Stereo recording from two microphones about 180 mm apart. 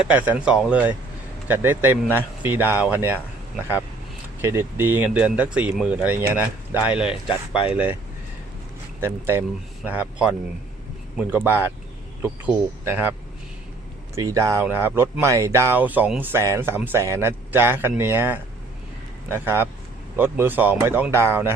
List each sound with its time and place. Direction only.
0.0 s speech: 10° right (ahead or behind)
4.4 s speech: 15° right (ahead or behind)
7.3 s speech: 30° left (ahead or behind)
7.7 s speech: 10° right (ahead or behind)
9.0 s speech: 10° right (ahead or behind)
14.2 s speech: 20° right (ahead or behind)